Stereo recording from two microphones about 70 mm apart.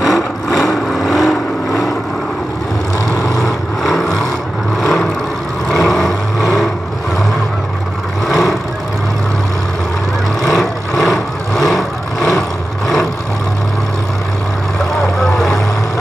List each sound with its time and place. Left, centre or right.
0.0 s vehicle: centre
3.2 s vehicle: left
3.8 s vehicle: centre
5.7 s vehicle: centre
8.3 s vehicle: centre
10.4 s vehicle: centre